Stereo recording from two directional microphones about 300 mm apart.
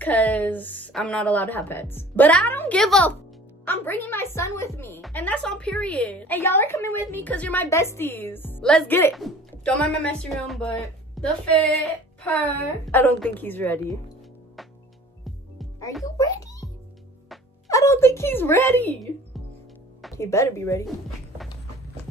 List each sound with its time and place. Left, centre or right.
0.0 s a woman's voice: centre
16.2 s music: centre
17.6 s speech: centre
20.0 s speech: centre